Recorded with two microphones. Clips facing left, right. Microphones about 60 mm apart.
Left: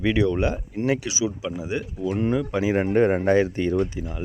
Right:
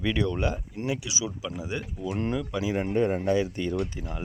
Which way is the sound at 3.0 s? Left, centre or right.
Left.